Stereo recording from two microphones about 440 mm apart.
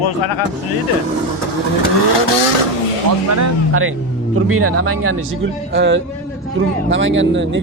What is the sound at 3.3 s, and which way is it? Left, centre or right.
Speech, right.